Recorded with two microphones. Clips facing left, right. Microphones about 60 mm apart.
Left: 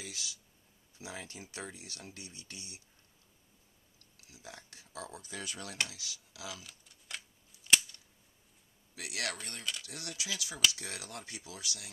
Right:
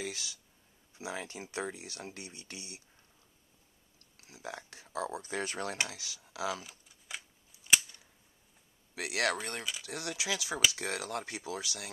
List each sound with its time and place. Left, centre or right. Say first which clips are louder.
0.0 s speech: right 6 dB; right
4.2 s speech: right 7 dB; right
6.9 s a sound: even; centre
8.9 s speech: right 7 dB; right
9.8 s speech: right 6 dB; right